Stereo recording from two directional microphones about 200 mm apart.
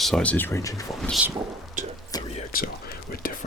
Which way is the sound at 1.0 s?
Centre (ahead or behind).